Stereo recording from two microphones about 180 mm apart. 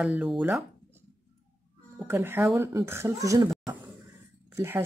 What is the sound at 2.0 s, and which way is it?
Speech, 10° right (ahead or behind).